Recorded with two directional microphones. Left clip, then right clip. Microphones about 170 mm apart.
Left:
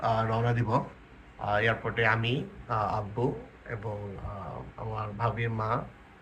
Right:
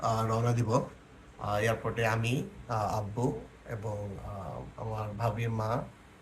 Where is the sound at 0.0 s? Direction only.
20° right (ahead or behind).